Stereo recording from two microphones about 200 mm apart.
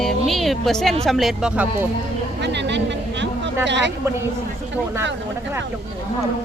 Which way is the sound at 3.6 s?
60° right (ahead or behind).